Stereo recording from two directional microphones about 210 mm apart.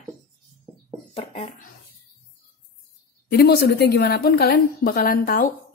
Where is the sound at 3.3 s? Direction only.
50° left (ahead or behind).